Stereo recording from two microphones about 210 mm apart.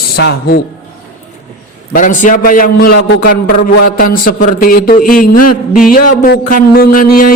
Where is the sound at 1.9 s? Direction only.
40° left (ahead or behind).